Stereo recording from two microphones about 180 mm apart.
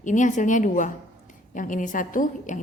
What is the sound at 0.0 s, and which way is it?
A woman's voice, 45° left (ahead or behind).